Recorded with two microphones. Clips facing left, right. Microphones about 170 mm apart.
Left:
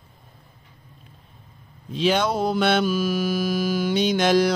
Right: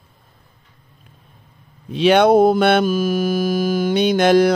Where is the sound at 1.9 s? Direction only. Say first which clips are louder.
Right 9 dB; 65° right (ahead or behind).